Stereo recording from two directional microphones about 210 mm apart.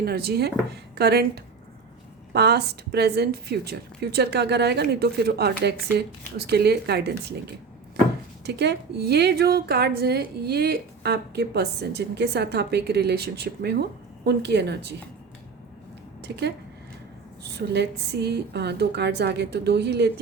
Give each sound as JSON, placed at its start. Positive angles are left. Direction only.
{"t": 0.0, "sound": "a woman's voice", "side_deg": -50}
{"t": 2.3, "sound": "a woman's voice", "side_deg": -50}
{"t": 8.4, "sound": "a woman's voice", "side_deg": -50}
{"t": 16.2, "sound": "speech", "side_deg": -55}
{"t": 17.7, "sound": "a woman's voice", "side_deg": -50}